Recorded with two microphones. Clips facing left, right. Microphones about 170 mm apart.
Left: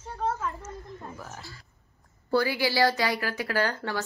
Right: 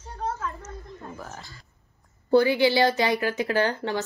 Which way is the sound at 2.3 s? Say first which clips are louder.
Right 6 dB; 20° right (ahead or behind).